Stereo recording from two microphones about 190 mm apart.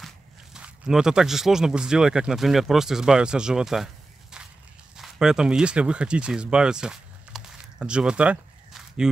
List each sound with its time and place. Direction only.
0.0 s speech: 5° right (ahead or behind)